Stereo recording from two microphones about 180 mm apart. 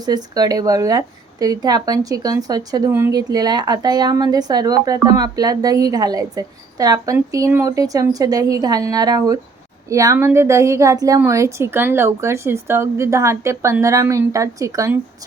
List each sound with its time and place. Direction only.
0.0 s a woman's voice: 20° right (ahead or behind)